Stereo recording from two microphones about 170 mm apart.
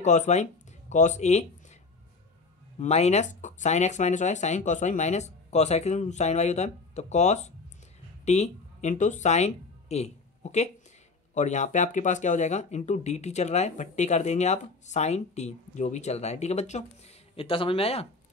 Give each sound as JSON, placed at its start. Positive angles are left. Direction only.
{"t": 0.0, "sound": "speech", "side_deg": 45}
{"t": 2.8, "sound": "speech", "side_deg": 40}